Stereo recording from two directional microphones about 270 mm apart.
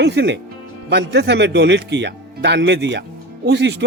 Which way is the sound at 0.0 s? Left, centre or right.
Right.